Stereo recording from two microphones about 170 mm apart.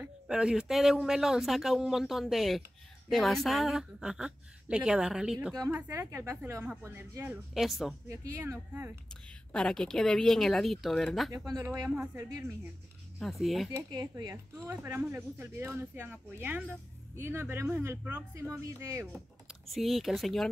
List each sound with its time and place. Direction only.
0.0 s speech: 5° right (ahead or behind)
7.5 s speech: centre (ahead or behind)
8.1 s speech: 15° right (ahead or behind)
9.1 s speech: 5° left (ahead or behind)
11.3 s speech: 20° right (ahead or behind)
13.2 s speech: centre (ahead or behind)
13.7 s speech: 20° right (ahead or behind)
19.4 s speech: centre (ahead or behind)